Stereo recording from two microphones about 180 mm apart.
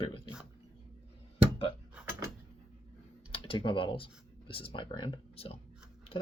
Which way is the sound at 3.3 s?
30° left (ahead or behind).